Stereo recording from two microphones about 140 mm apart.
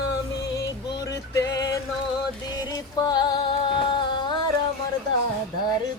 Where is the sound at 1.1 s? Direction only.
25° left (ahead or behind).